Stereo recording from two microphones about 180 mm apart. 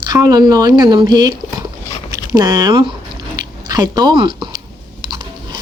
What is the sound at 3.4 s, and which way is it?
Biting, 20° right (ahead or behind).